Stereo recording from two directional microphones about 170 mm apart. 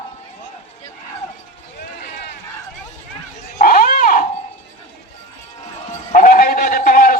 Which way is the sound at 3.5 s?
55° left (ahead or behind).